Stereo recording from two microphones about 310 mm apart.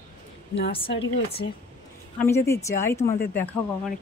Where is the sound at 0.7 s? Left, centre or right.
Centre.